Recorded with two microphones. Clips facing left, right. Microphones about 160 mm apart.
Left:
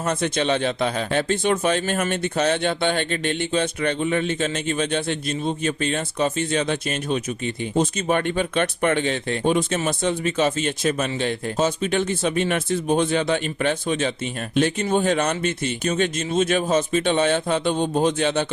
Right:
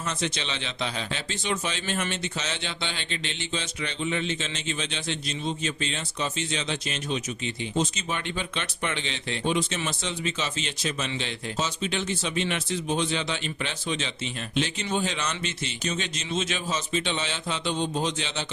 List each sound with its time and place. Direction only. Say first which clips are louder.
0.0 s a man's voice: left 9 dB; 55° left (ahead or behind)